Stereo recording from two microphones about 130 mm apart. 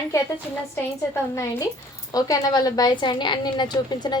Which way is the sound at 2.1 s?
30° left (ahead or behind).